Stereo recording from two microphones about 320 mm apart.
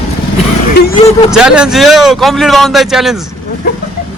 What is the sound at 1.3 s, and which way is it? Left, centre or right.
A man's voice, centre.